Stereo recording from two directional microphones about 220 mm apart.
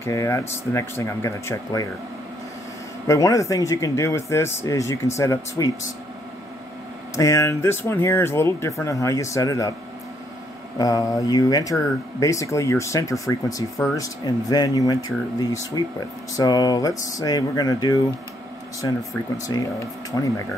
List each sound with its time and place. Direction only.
0.0 s speech: 15° left (ahead or behind)
3.1 s speech: 15° left (ahead or behind)
7.2 s speech: 15° left (ahead or behind)
10.8 s speech: 15° left (ahead or behind)
20.1 s speech: 5° left (ahead or behind)